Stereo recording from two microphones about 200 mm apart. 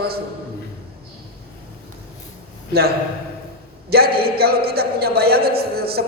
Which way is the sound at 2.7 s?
50° right (ahead or behind).